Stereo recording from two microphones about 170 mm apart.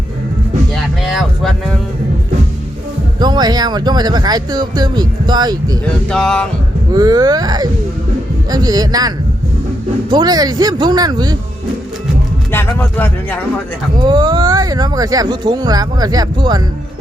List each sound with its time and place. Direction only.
1.0 s a sound: centre (ahead or behind)
3.2 s speech: 25° right (ahead or behind)
6.1 s speech: 5° left (ahead or behind)
6.9 s speech: 20° right (ahead or behind)
12.5 s speech: 15° left (ahead or behind)
14.0 s speech: 25° right (ahead or behind)